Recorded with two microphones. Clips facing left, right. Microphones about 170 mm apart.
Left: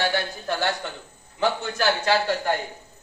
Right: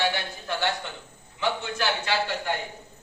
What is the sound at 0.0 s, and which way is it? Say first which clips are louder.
A man's voice: left 3 dB; 40° left (ahead or behind).